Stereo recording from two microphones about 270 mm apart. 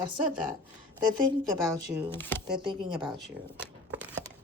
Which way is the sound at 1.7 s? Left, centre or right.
Centre.